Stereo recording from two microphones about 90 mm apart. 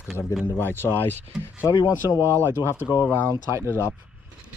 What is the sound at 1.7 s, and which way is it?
Speech, 55° left (ahead or behind).